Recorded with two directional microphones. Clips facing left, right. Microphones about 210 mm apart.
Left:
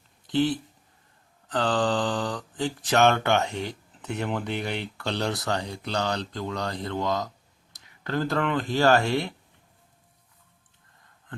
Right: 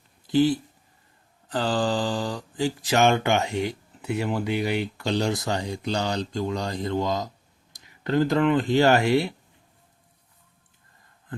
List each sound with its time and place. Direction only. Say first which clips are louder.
0.3 s speech: right 4 dB; 10° right (ahead or behind)